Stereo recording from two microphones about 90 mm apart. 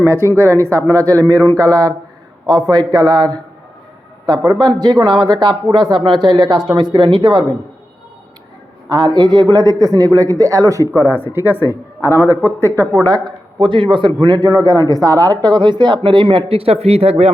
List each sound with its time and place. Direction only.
0.3 s speech: 30° right (ahead or behind); by 3.4 s 50° right (ahead or behind)
4.8 s speech: 50° right (ahead or behind)
8.9 s speech: 50° right (ahead or behind)
11.3 s a man's voice: 25° right (ahead or behind)
12.8 s speech: 20° left (ahead or behind)
13.1 s speech: 45° right (ahead or behind)
13.6 s speech: 65° right (ahead or behind)
16.0 s speech: 75° right (ahead or behind); by 17.1 s 90° right